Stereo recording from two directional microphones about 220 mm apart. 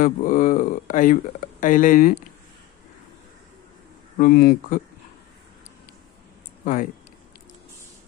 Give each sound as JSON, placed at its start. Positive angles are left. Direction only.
{"t": 0.0, "sound": "speech", "side_deg": 35}
{"t": 4.2, "sound": "speech", "side_deg": 45}
{"t": 6.6, "sound": "speech", "side_deg": 35}